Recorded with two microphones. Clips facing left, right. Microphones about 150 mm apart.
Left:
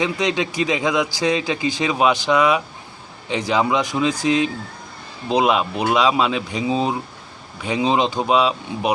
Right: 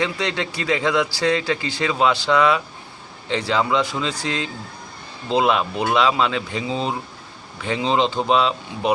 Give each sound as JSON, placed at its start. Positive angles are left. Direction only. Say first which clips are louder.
{"t": 0.0, "sound": "speech", "louder": "left 3 dB", "side_deg": 15}